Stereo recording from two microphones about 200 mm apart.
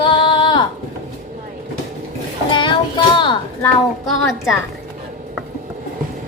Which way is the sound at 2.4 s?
25° left (ahead or behind).